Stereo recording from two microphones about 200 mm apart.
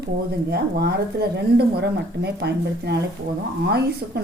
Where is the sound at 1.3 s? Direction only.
55° right (ahead or behind).